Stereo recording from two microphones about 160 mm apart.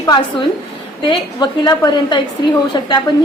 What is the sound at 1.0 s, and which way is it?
A woman's voice, 30° left (ahead or behind).